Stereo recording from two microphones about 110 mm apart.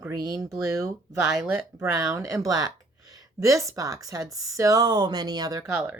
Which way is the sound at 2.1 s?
30° right (ahead or behind).